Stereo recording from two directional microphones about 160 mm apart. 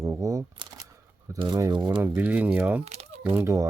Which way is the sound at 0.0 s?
20° right (ahead or behind).